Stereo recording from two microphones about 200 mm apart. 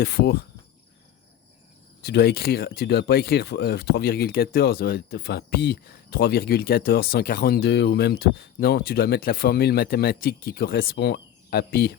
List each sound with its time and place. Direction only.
0.0 s speech: 50° left (ahead or behind)
2.0 s speech: 55° left (ahead or behind)